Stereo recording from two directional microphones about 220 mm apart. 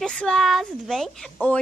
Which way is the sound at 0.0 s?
5° left (ahead or behind).